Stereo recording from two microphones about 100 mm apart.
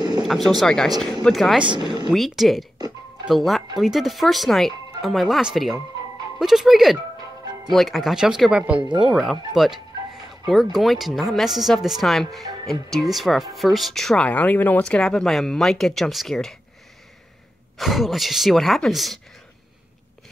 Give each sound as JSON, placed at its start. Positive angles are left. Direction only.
{"t": 0.0, "sound": "a sound", "side_deg": -45}
{"t": 0.6, "sound": "speech", "side_deg": 5}
{"t": 1.9, "sound": "speech", "side_deg": -45}
{"t": 2.1, "sound": "speech", "side_deg": 0}
{"t": 14.2, "sound": "speech", "side_deg": 15}
{"t": 17.7, "sound": "speech", "side_deg": 0}